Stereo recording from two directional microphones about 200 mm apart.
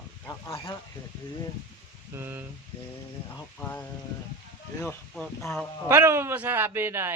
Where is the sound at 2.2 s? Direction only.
10° right (ahead or behind).